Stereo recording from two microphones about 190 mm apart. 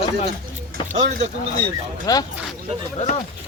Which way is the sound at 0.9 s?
35° right (ahead or behind).